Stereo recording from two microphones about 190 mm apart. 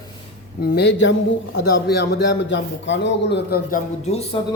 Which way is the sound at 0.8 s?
60° left (ahead or behind).